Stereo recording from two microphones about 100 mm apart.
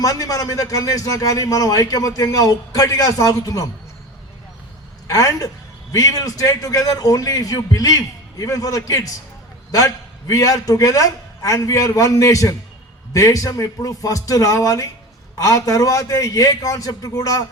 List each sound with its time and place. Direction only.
0.0 s a man's voice: 35° left (ahead or behind)
5.0 s a man's voice: 35° left (ahead or behind)